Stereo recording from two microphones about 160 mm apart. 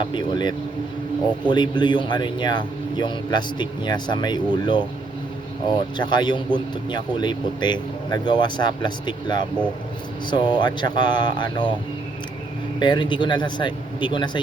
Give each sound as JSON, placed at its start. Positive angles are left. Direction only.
{"t": 0.0, "sound": "speech", "side_deg": 30}
{"t": 12.8, "sound": "speech", "side_deg": 30}